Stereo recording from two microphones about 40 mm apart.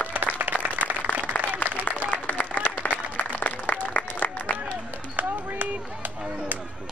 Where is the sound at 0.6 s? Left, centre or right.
Right.